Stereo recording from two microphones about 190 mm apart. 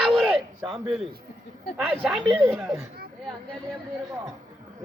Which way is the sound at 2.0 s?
5° right (ahead or behind).